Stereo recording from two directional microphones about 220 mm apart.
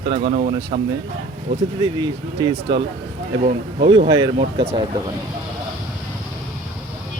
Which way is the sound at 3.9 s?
25° right (ahead or behind).